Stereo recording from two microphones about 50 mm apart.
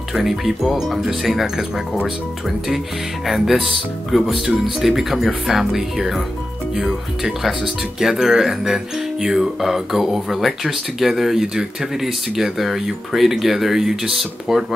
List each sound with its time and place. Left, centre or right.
0.1 s speech: centre
3.3 s speech: centre